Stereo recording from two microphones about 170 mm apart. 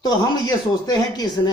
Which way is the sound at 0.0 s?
25° left (ahead or behind).